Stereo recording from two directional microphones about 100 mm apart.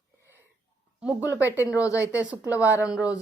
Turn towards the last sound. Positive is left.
turn(degrees=-10)  # may be behind; listen again after turning